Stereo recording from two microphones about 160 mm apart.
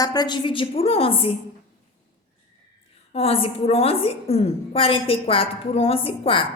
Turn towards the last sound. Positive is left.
turn(degrees=35)  # may be behind; listen again after turning